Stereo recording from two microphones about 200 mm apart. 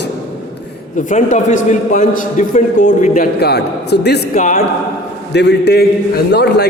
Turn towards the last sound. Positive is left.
turn(degrees=55)  # may be behind; listen again after turning